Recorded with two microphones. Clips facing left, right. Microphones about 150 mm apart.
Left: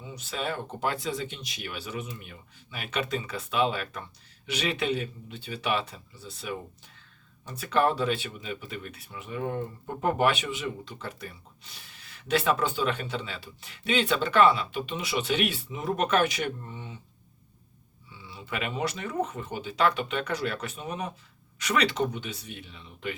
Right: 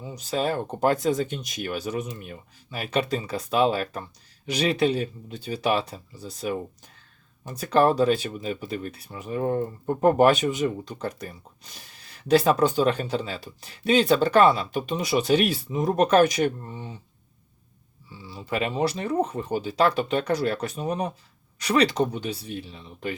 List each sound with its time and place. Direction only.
0.0 s speech: 40° right (ahead or behind)
18.1 s speech: 35° right (ahead or behind)